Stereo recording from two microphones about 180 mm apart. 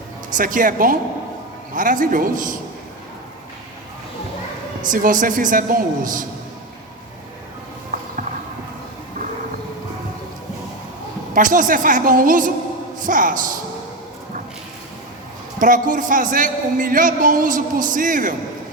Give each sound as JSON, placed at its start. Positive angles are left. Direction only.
{"t": 0.3, "sound": "a man's voice", "side_deg": -50}
{"t": 4.8, "sound": "a man's voice", "side_deg": -50}
{"t": 11.3, "sound": "a man's voice", "side_deg": -50}
{"t": 15.5, "sound": "a man's voice", "side_deg": -50}